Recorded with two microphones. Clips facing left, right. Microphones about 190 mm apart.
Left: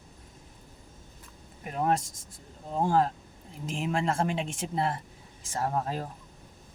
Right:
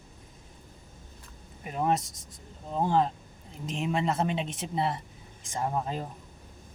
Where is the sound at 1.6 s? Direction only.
Centre (ahead or behind).